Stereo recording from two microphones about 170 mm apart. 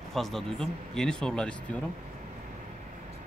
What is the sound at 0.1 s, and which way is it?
Speech, centre (ahead or behind).